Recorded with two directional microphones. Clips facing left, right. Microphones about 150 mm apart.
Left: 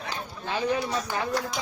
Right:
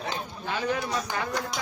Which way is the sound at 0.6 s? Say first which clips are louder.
Left 2 dB; 10° left (ahead or behind).